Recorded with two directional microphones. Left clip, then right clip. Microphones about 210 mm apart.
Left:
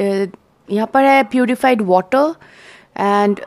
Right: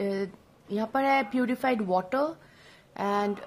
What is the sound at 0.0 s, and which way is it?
A woman's voice, 40° left (ahead or behind).